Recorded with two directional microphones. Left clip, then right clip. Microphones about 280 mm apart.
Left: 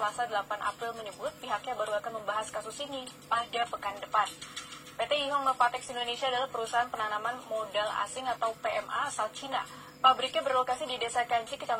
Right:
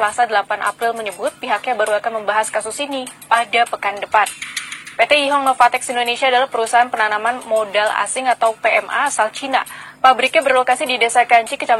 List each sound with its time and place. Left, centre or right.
0.0 s speech: right